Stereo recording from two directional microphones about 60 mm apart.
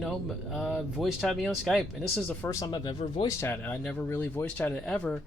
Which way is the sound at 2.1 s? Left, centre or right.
Left.